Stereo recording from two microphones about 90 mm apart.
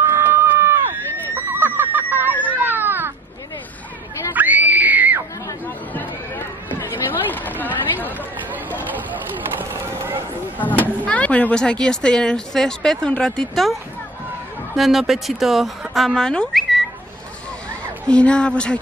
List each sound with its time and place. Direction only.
0.3 s a sound: 25° right (ahead or behind)
4.3 s screaming: 20° right (ahead or behind)
6.9 s chatter: 20° left (ahead or behind)
9.6 s a sound: 25° right (ahead or behind)
10.6 s speech: 20° left (ahead or behind)
14.8 s speech: centre (ahead or behind)
18.0 s speech: 10° left (ahead or behind)